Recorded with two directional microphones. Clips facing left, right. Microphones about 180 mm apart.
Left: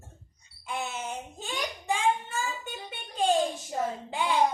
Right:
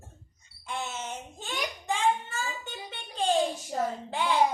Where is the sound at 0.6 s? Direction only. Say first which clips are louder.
Left 1 dB; 10° left (ahead or behind).